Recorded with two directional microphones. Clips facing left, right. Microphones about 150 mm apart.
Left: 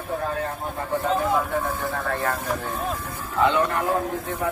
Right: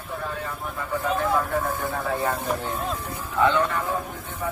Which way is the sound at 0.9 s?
25° left (ahead or behind).